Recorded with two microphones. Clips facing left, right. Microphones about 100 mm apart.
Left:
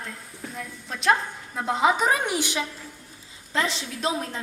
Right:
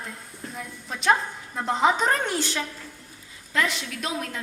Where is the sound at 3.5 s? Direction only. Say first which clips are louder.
Even; 30° left (ahead or behind).